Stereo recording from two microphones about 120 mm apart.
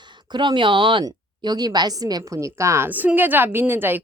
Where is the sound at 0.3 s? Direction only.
40° right (ahead or behind).